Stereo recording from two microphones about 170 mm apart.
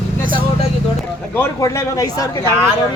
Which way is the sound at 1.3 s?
20° left (ahead or behind).